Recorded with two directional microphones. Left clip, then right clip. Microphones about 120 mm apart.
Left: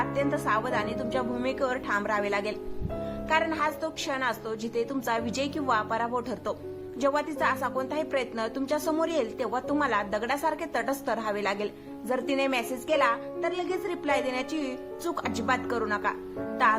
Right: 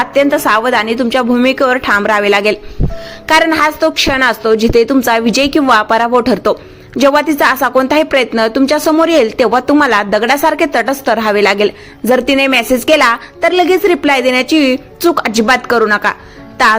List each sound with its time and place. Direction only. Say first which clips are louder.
0.0 s a woman's voice: right 17 dB; 35° right (ahead or behind)